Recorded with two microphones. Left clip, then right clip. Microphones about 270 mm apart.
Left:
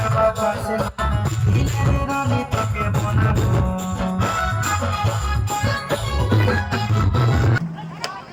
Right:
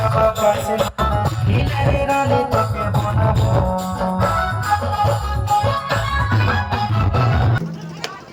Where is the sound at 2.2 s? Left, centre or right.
Right.